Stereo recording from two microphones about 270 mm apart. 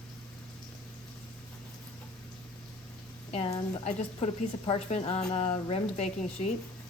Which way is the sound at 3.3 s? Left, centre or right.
Left.